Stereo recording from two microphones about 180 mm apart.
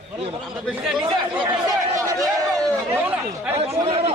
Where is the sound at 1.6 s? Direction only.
20° right (ahead or behind).